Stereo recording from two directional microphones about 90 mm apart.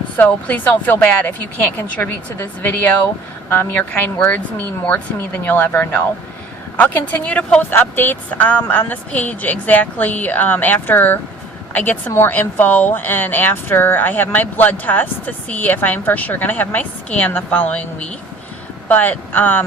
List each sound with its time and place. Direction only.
0.2 s a woman's voice: 15° left (ahead or behind)